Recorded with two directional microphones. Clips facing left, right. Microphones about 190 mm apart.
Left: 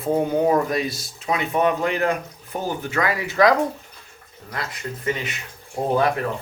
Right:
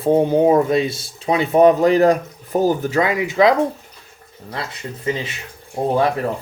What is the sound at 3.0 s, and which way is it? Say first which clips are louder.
Speech: right 2 dB; 20° right (ahead or behind).